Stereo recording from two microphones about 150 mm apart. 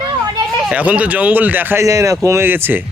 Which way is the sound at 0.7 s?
10° right (ahead or behind).